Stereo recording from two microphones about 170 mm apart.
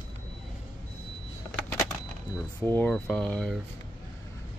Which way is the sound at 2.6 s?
10° left (ahead or behind).